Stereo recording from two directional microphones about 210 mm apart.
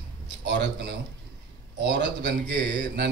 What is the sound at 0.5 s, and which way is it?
A man's voice, 55° right (ahead or behind).